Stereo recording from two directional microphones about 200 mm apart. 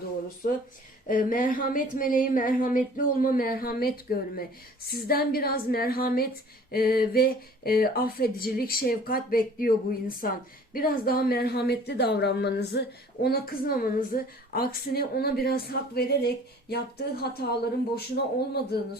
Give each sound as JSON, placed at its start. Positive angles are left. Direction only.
{"t": 1.0, "sound": "a woman's voice", "side_deg": 45}